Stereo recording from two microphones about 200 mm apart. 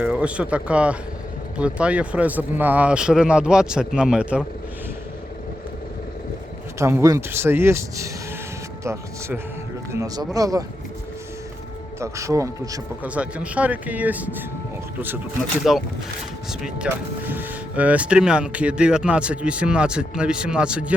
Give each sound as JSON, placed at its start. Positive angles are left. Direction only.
{"t": 0.0, "sound": "speech", "side_deg": -5}
{"t": 6.7, "sound": "a man's voice", "side_deg": -15}
{"t": 11.9, "sound": "a man's voice", "side_deg": -15}
{"t": 15.6, "sound": "speech", "side_deg": 0}